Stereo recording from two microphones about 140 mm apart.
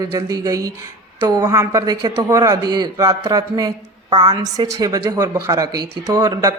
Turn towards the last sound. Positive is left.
turn(degrees=-30)  # may be behind; listen again after turning